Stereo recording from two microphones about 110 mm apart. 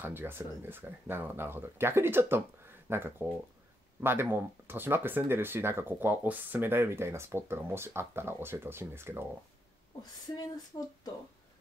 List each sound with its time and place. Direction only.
0.0 s speech: 20° right (ahead or behind)
10.7 s speech: 35° left (ahead or behind)